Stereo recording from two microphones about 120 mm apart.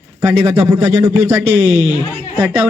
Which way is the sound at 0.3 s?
20° right (ahead or behind).